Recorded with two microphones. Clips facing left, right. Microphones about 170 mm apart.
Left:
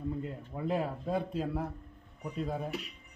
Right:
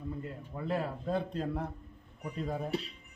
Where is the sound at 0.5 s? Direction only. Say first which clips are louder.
Left 2 dB; 15° left (ahead or behind).